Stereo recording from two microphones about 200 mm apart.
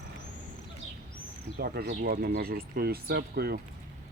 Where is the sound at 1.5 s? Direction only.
50° right (ahead or behind).